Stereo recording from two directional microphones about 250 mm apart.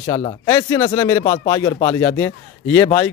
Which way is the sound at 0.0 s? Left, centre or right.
Centre.